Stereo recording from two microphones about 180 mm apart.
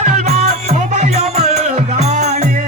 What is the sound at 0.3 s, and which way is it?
Music, 40° right (ahead or behind).